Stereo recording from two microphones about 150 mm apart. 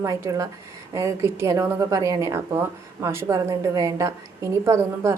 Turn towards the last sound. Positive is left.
turn(degrees=-20)  # may be behind; listen again after turning